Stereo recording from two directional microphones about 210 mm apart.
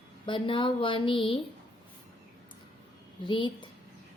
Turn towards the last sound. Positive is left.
turn(degrees=25)  # may be behind; listen again after turning